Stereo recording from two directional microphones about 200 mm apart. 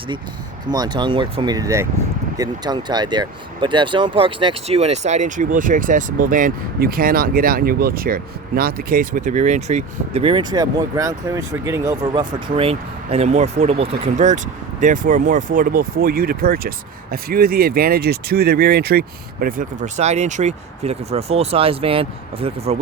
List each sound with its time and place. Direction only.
0.7 s speech: 20° right (ahead or behind)